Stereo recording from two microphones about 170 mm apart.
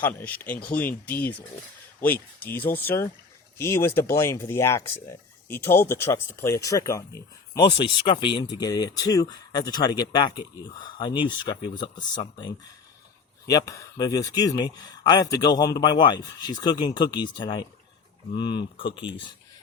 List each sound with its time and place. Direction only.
0.0 s speech: 10° left (ahead or behind)
2.5 s speech: 10° left (ahead or behind)
7.8 s speech: 30° left (ahead or behind)